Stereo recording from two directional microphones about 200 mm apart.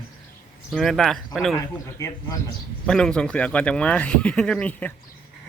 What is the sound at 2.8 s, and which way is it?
Speech, 5° left (ahead or behind).